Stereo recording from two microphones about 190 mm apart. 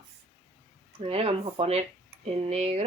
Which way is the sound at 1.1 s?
30° right (ahead or behind).